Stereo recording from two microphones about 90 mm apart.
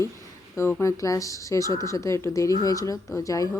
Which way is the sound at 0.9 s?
40° left (ahead or behind).